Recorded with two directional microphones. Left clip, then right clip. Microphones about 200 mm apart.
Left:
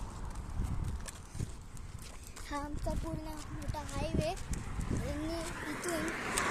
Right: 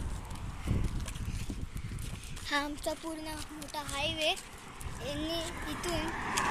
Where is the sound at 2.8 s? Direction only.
Centre (ahead or behind).